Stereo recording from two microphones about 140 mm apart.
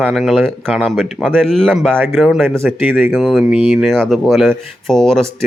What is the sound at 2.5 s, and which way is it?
Speech, 20° right (ahead or behind).